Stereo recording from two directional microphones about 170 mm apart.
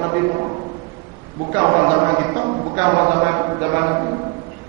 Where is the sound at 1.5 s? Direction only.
25° right (ahead or behind).